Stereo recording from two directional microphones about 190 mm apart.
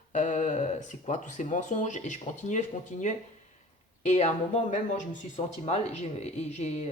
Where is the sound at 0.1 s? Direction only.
40° left (ahead or behind).